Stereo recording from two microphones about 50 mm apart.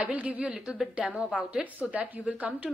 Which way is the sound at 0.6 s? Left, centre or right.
Centre.